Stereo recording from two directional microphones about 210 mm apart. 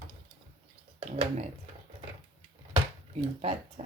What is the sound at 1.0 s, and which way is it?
Speech, 30° right (ahead or behind).